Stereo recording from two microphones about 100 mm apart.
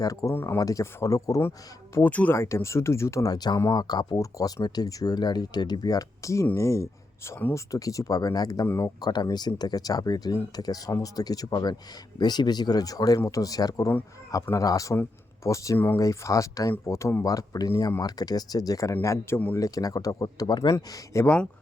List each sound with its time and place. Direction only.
0.0 s speech: 35° left (ahead or behind)
0.3 s speech: 25° left (ahead or behind)
0.6 s speech: 35° left (ahead or behind)
2.0 s speech: 15° left (ahead or behind)
2.3 s speech: 25° left (ahead or behind)
3.3 s speech: 45° left (ahead or behind)
7.3 s speech: 20° left (ahead or behind)
7.5 s speech: 35° left (ahead or behind)
8.6 s speech: 25° left (ahead or behind)
9.0 s speech: 45° left (ahead or behind); by 17.2 s 25° left (ahead or behind)
17.2 s speech: 35° left (ahead or behind)
20.7 s speech: 30° left (ahead or behind)